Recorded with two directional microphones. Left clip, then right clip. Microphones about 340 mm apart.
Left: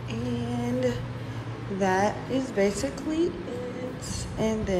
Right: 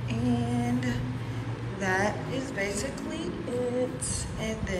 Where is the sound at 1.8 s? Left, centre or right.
Centre.